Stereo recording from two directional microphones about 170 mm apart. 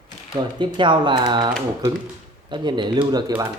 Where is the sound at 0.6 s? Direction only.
30° right (ahead or behind).